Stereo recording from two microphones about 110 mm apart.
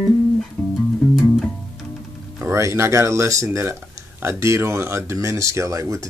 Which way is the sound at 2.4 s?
25° right (ahead or behind).